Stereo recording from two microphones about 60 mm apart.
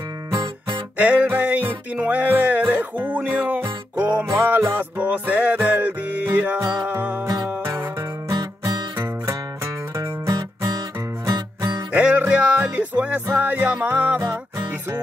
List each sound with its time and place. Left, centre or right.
0.9 s music: right
8.9 s music: right
9.9 s music: right
11.9 s music: right